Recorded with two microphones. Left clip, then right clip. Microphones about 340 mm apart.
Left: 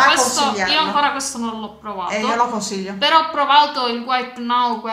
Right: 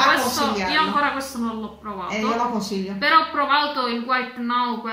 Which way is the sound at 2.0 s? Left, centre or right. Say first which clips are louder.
Left 5 dB; left.